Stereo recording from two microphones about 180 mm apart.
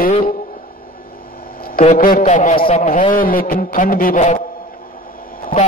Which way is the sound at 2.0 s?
50° left (ahead or behind).